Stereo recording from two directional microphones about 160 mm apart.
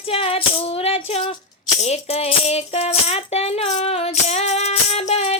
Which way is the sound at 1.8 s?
40° left (ahead or behind).